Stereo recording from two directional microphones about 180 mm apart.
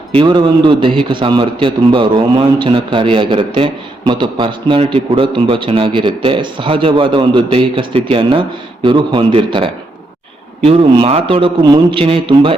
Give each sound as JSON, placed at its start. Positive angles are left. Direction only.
{"t": 0.1, "sound": "a man's voice", "side_deg": -25}
{"t": 10.7, "sound": "a man's voice", "side_deg": -30}